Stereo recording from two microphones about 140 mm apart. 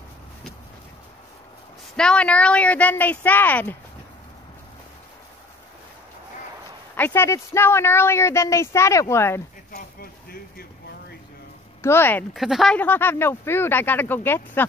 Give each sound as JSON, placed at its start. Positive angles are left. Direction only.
{"t": 2.0, "sound": "speech", "side_deg": 5}
{"t": 7.0, "sound": "speech", "side_deg": 15}
{"t": 9.7, "sound": "speech", "side_deg": 90}
{"t": 11.8, "sound": "speech", "side_deg": 15}
{"t": 12.4, "sound": "speech", "side_deg": 0}
{"t": 12.7, "sound": "speech", "side_deg": 15}